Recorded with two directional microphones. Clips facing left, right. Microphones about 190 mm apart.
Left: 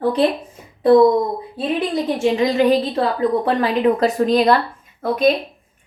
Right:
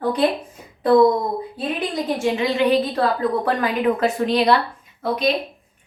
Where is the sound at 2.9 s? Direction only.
20° left (ahead or behind).